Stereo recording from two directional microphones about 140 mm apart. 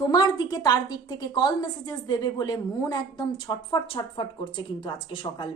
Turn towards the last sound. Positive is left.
turn(degrees=35)  # may be behind; listen again after turning